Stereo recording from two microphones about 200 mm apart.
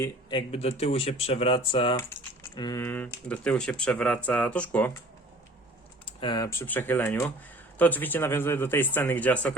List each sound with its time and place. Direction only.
0.3 s speech: 25° left (ahead or behind)
2.6 s speech: 15° left (ahead or behind)
6.1 s speech: 25° left (ahead or behind); by 9.6 s 5° left (ahead or behind)